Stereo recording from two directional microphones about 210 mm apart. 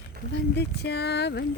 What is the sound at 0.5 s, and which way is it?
Speech, 50° left (ahead or behind).